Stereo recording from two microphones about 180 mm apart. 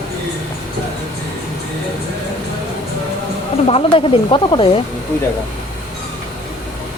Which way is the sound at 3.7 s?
30° left (ahead or behind).